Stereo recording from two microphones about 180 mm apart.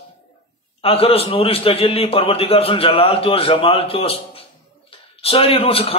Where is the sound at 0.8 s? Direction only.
30° left (ahead or behind).